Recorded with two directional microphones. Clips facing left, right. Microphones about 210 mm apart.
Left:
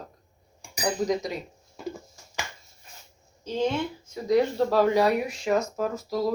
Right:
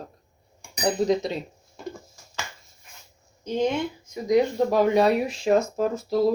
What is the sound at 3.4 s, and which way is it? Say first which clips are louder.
Speech: right 2 dB; 15° right (ahead or behind).